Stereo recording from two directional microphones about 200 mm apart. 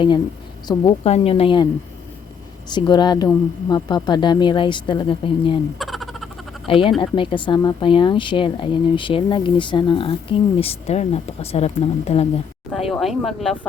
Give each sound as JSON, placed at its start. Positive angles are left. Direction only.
{"t": 0.7, "sound": "speech", "side_deg": 25}
{"t": 2.6, "sound": "speech", "side_deg": 20}
{"t": 5.8, "sound": "a sound", "side_deg": 0}
{"t": 6.7, "sound": "speech", "side_deg": 25}
{"t": 12.7, "sound": "speech", "side_deg": 0}